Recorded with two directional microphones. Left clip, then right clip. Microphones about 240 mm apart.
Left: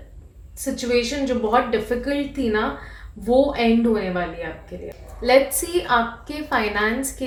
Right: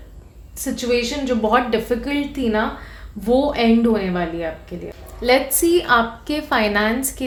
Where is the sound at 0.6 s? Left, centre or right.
Right.